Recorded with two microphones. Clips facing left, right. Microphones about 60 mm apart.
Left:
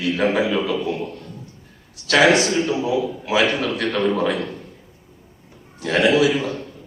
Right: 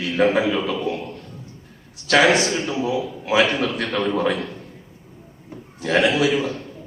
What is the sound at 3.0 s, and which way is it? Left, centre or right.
A man's voice, centre.